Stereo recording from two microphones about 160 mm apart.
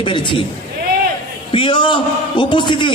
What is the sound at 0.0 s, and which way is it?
Speech, 30° left (ahead or behind).